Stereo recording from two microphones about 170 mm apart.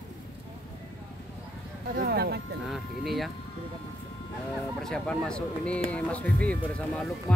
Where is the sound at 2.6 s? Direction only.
Centre (ahead or behind).